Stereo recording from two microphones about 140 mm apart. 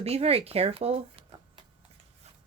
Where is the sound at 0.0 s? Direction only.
45° right (ahead or behind).